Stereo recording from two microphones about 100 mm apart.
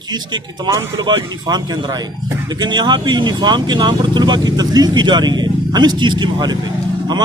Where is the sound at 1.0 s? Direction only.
45° right (ahead or behind).